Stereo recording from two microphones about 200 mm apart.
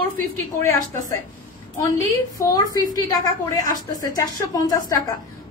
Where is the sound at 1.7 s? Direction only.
15° left (ahead or behind).